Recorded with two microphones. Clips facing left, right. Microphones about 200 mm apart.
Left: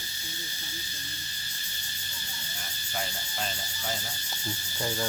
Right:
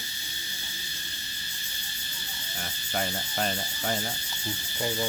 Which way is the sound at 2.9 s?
55° right (ahead or behind).